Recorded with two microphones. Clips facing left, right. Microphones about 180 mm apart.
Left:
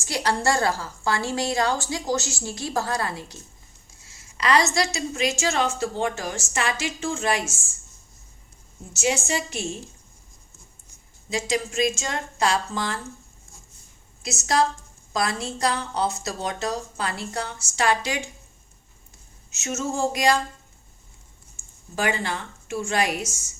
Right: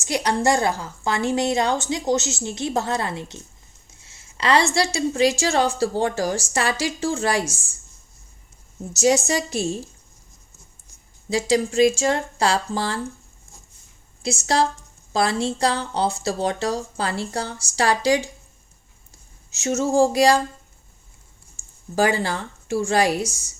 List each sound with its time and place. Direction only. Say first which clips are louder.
0.0 s a woman's voice: right 3 dB; 20° right (ahead or behind); by 7.7 s 35° right (ahead or behind)
8.9 s a woman's voice: right 6 dB; 40° right (ahead or behind)
11.3 s a woman's voice: right 6 dB; 35° right (ahead or behind)
14.2 s a woman's voice: right 2 dB; 30° right (ahead or behind)
19.5 s a woman's voice: right 6 dB; 30° right (ahead or behind)
21.9 s a woman's voice: right 5 dB; 35° right (ahead or behind)